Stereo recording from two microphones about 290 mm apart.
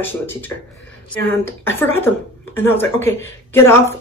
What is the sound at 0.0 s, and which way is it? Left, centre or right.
Speech, centre.